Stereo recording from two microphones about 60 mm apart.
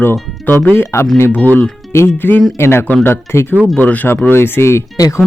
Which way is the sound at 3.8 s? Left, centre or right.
Left.